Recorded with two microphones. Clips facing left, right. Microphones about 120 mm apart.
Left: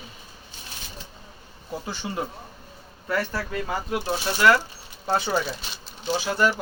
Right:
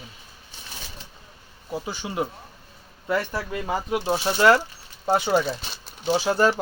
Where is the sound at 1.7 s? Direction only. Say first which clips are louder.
Right 1 dB; 15° right (ahead or behind).